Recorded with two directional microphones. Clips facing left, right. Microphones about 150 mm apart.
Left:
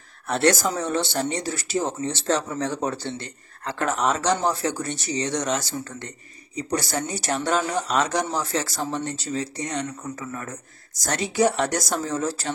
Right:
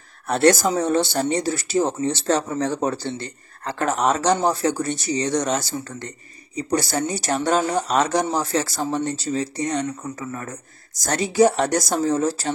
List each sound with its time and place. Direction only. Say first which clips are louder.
0.3 s speech: right 4 dB; 35° right (ahead or behind)